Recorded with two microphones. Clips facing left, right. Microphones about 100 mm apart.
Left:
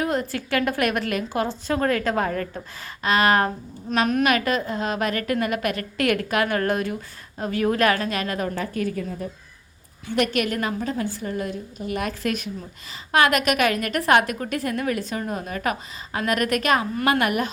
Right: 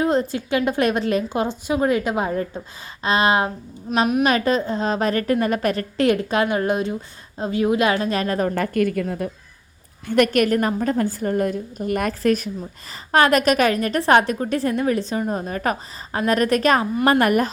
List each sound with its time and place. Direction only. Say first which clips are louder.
0.0 s a woman's voice: right 5 dB; 25° right (ahead or behind)
8.1 s a woman's voice: right 5 dB; 35° right (ahead or behind)
8.5 s a woman's voice: right 6 dB; 60° right (ahead or behind)
10.1 s a woman's voice: right 6 dB; 50° right (ahead or behind)